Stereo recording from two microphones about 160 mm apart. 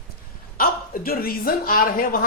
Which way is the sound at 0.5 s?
65° left (ahead or behind).